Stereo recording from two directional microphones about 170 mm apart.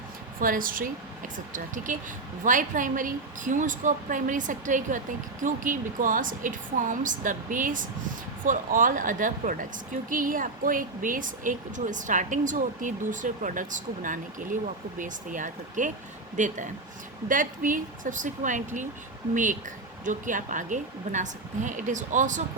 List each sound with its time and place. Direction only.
0.3 s a woman's voice: 55° right (ahead or behind)